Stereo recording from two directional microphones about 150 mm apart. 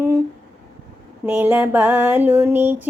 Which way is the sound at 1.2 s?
15° right (ahead or behind).